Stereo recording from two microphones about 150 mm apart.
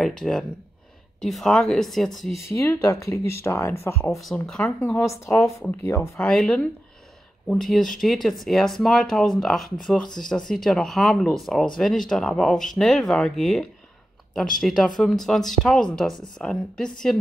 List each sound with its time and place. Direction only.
0.0 s speech: 5° left (ahead or behind)
2.4 s speech: 20° left (ahead or behind)
4.2 s speech: centre (ahead or behind)
4.9 s speech: 20° left (ahead or behind)
6.2 s speech: 5° left (ahead or behind)